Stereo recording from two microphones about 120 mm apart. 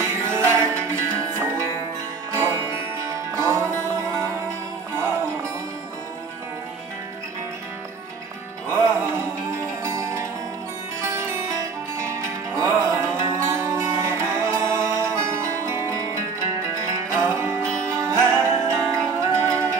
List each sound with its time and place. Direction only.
0.0 s music: 20° right (ahead or behind)
8.7 s music: 25° right (ahead or behind)